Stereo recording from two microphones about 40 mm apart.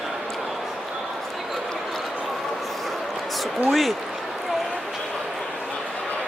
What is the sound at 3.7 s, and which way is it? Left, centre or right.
Speech, centre.